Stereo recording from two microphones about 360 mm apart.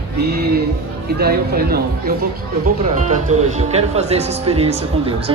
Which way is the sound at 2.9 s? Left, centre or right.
Centre.